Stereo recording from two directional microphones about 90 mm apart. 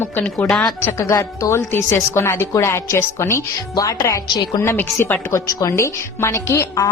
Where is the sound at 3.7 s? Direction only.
40° left (ahead or behind).